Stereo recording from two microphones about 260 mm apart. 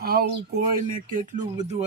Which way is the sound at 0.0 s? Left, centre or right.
Right.